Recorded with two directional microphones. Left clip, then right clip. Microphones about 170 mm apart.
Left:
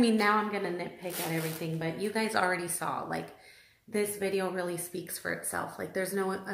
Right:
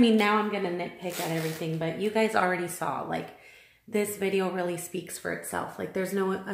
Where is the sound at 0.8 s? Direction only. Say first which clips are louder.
Right 4 dB; 40° right (ahead or behind).